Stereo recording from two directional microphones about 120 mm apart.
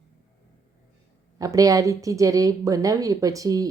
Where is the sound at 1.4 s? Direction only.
30° right (ahead or behind).